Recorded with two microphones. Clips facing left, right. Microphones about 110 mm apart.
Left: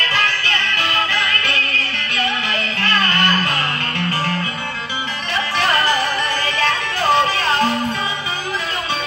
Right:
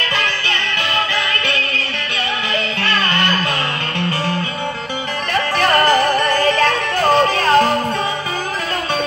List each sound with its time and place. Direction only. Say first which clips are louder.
0.1 s music: even; 40° left (ahead or behind)
5.3 s music: right 3 dB; 45° right (ahead or behind)